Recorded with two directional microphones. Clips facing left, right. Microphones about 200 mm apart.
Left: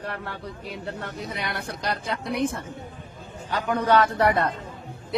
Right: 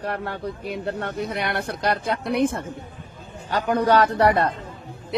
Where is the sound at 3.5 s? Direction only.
40° right (ahead or behind).